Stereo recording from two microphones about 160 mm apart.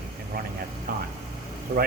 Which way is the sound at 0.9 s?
65° right (ahead or behind).